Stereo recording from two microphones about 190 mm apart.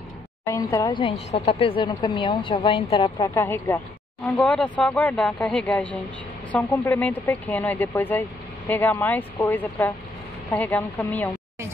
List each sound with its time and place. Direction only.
0.5 s speech: 15° left (ahead or behind)
3.3 s speech: 10° left (ahead or behind)